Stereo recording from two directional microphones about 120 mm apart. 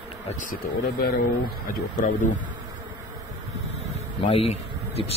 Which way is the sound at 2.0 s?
90° left.